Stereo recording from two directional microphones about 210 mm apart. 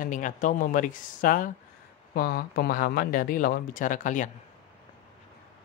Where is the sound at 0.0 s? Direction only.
40° left (ahead or behind).